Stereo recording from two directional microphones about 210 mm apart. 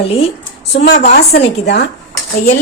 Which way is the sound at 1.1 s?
50° left (ahead or behind).